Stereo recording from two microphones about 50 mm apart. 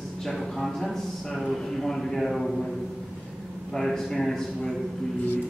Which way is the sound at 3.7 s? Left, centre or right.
Centre.